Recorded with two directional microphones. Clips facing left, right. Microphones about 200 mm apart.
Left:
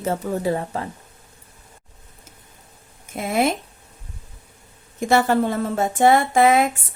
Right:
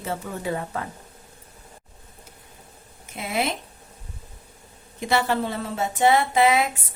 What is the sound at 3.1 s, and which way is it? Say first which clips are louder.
Speech: left 6 dB; 50° left (ahead or behind).